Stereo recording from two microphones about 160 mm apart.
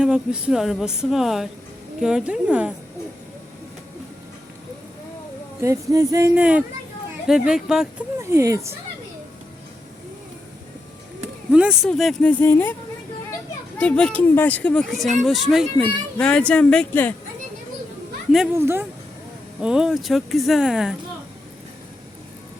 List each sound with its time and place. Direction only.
0.0 s speech: 5° right (ahead or behind)
5.6 s speech: 20° right (ahead or behind); by 7.9 s 5° right (ahead or behind)
8.2 s speech: 20° right (ahead or behind)
11.5 s speech: 5° right (ahead or behind); by 12.7 s 15° left (ahead or behind)
13.7 s speech: 5° left (ahead or behind)
18.5 s speech: 15° right (ahead or behind)
19.6 s speech: 5° right (ahead or behind)